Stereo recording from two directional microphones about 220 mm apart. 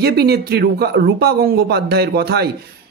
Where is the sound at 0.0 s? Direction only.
45° right (ahead or behind).